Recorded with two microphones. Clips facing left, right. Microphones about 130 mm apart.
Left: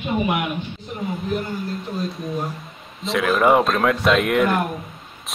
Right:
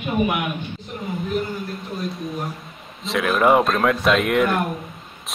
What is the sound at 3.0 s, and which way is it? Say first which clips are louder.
Speech: left 1 dB; centre (ahead or behind).